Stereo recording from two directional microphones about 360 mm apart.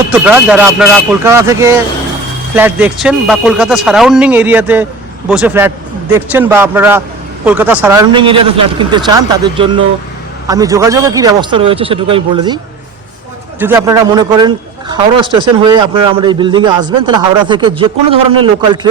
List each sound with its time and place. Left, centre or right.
0.1 s speech: centre
13.6 s speech: centre